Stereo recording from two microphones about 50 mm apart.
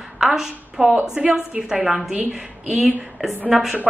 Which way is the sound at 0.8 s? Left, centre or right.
Right.